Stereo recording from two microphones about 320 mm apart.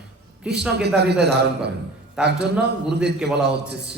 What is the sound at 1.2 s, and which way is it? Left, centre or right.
A man's voice, right.